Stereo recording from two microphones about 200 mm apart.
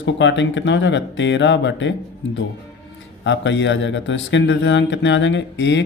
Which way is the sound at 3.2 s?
65° left (ahead or behind).